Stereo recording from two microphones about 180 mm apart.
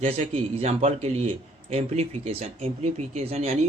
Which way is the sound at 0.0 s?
35° right (ahead or behind).